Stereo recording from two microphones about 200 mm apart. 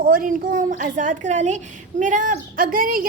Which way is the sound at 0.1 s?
45° right (ahead or behind).